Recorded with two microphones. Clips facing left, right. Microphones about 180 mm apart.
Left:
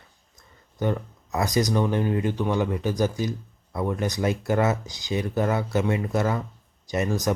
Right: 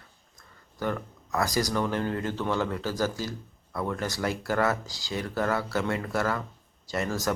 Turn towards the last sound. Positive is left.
turn(degrees=20)  # may be behind; listen again after turning